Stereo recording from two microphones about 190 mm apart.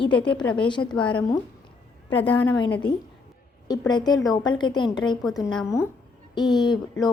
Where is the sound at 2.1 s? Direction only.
10° left (ahead or behind).